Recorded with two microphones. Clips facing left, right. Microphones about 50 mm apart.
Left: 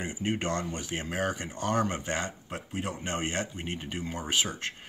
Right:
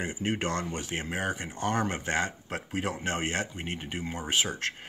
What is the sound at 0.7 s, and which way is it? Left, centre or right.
Speech, right.